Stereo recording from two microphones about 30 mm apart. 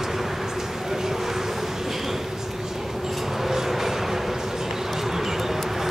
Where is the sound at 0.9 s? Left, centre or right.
Centre.